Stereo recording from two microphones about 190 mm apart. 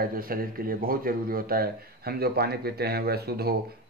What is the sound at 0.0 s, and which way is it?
Speech, 50° right (ahead or behind).